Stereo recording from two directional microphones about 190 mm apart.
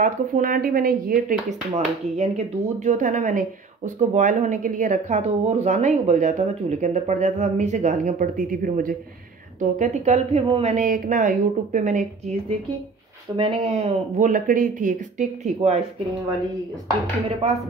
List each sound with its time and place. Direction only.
0.0 s speech: 45° right (ahead or behind)
2.1 s speech: 35° right (ahead or behind)
13.4 s speech: 30° right (ahead or behind)